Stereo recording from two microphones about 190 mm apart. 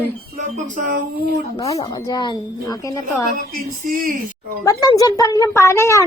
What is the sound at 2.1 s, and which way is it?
Speech, 25° left (ahead or behind).